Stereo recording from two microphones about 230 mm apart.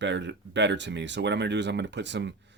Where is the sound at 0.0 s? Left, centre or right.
Right.